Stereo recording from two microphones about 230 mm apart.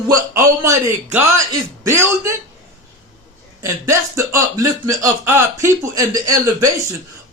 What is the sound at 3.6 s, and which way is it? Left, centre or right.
Speech, centre.